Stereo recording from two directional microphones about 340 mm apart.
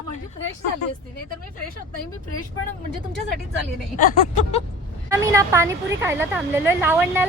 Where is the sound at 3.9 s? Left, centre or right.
Left.